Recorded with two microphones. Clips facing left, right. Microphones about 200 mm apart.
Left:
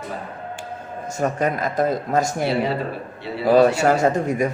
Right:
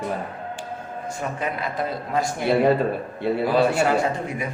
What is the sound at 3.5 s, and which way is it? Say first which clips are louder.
Speech: left 6 dB; 45° left (ahead or behind).